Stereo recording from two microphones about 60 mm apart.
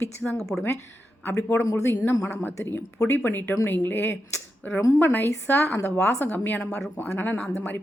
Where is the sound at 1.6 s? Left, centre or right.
Left.